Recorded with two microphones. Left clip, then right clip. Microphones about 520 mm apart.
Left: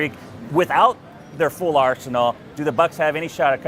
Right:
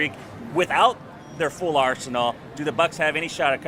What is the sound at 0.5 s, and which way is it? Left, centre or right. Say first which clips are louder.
A man's voice: left 3 dB; left.